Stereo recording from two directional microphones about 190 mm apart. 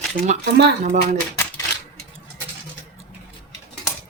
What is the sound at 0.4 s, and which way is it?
Speech, 60° right (ahead or behind).